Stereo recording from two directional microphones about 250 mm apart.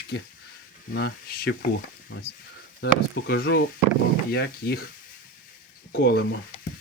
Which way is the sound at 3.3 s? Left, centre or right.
Left.